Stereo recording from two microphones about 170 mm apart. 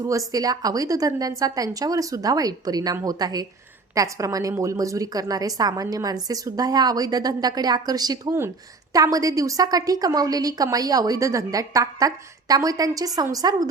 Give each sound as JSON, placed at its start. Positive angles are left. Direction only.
{"t": 0.0, "sound": "a woman's voice", "side_deg": -20}